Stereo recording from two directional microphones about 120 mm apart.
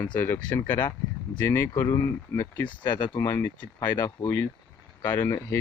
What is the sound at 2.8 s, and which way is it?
Speech, 40° left (ahead or behind).